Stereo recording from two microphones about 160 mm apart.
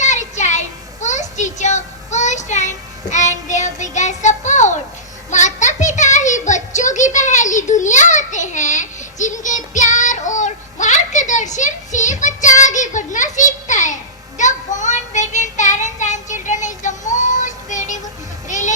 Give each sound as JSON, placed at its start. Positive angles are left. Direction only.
{"t": 0.0, "sound": "child singing", "side_deg": 50}
{"t": 5.3, "sound": "a sound", "side_deg": 50}
{"t": 18.4, "sound": "music", "side_deg": 50}